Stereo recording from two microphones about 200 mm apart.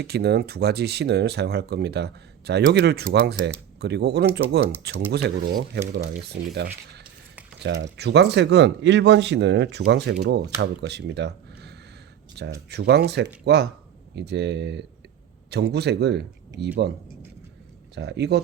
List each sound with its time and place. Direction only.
0.0 s speech: 55° right (ahead or behind)
17.9 s speech: 60° right (ahead or behind)